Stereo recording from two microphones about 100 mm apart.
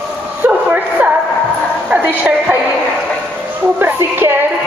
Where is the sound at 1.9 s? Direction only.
15° right (ahead or behind).